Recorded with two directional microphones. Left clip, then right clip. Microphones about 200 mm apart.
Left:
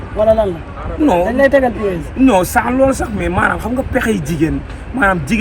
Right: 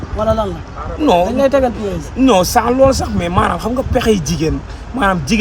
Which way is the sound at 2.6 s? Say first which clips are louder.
Right 2 dB; 40° right (ahead or behind).